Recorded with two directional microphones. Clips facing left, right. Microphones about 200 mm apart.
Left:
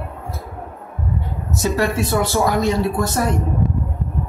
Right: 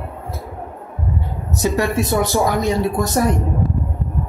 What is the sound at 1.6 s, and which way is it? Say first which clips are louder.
Speech: right 1 dB; 15° right (ahead or behind).